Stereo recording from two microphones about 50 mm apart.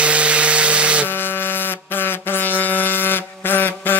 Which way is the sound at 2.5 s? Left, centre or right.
Left.